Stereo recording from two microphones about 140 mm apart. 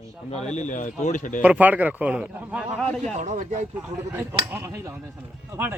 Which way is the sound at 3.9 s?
20° right (ahead or behind).